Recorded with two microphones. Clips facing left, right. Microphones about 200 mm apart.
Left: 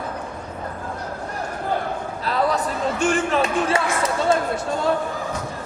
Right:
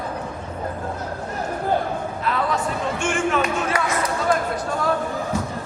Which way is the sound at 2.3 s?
35° left (ahead or behind).